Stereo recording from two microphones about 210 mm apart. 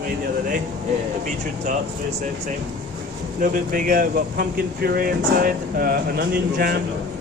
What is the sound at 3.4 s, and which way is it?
Speech, 40° right (ahead or behind).